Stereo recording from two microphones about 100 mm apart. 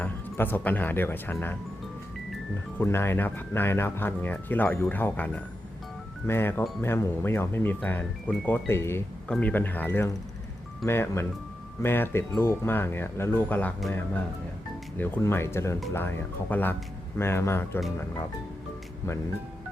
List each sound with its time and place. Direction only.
0.0 s speech: 20° left (ahead or behind)
2.7 s speech: 25° left (ahead or behind)